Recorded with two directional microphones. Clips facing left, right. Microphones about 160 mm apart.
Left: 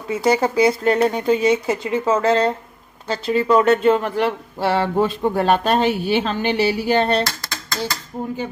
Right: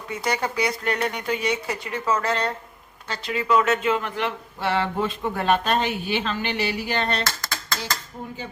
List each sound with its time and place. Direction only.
0.1 s speech: 30° left (ahead or behind)